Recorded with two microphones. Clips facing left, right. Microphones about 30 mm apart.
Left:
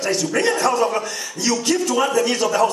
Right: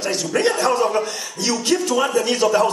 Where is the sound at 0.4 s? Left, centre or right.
Centre.